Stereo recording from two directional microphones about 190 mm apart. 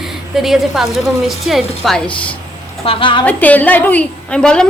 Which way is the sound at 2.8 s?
25° left (ahead or behind).